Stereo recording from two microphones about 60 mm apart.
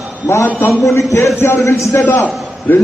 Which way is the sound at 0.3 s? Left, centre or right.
Left.